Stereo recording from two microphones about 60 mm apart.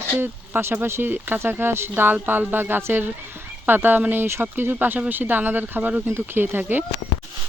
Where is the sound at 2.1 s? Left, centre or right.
Right.